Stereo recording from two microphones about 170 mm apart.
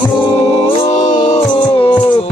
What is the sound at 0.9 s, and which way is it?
Music, 45° left (ahead or behind).